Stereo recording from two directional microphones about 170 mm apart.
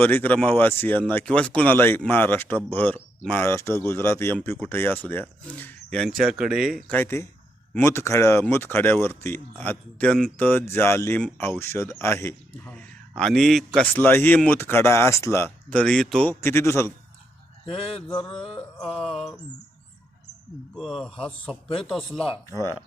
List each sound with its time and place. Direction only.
0.0 s speech: 10° left (ahead or behind)
16.4 s speech: 15° left (ahead or behind)
17.7 s mantra: 35° left (ahead or behind)
18.5 s music: 5° left (ahead or behind)
20.7 s music: centre (ahead or behind)